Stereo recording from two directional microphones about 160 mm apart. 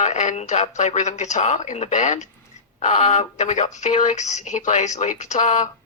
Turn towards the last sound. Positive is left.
turn(degrees=45)  # may be behind; listen again after turning